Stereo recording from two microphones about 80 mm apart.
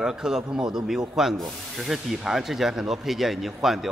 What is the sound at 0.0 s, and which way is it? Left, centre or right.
A man's voice, centre.